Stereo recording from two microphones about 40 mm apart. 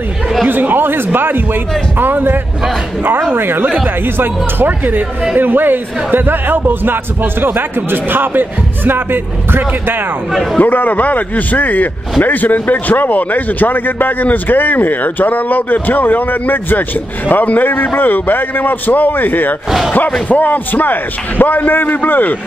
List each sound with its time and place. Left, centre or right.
0.5 s a man's voice: right
10.3 s a man's voice: centre
10.6 s a man's voice: left